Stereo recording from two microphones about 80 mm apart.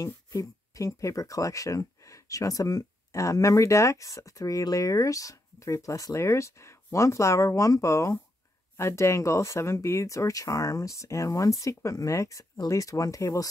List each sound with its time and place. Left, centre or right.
0.0 s speech: left